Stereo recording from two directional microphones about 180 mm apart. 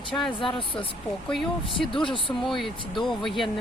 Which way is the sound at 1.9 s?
30° left (ahead or behind).